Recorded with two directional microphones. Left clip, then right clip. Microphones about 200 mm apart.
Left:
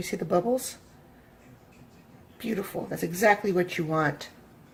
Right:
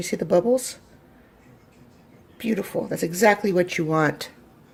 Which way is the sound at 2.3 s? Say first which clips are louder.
Right 6 dB; 30° right (ahead or behind).